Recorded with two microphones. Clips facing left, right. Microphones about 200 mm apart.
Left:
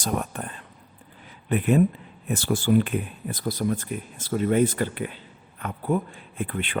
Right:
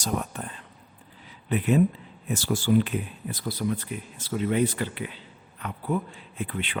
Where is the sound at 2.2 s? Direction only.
55° left (ahead or behind).